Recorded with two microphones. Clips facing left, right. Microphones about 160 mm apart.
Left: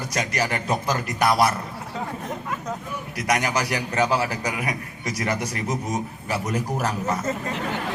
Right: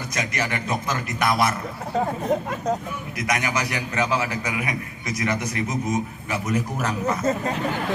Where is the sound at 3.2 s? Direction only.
35° left (ahead or behind).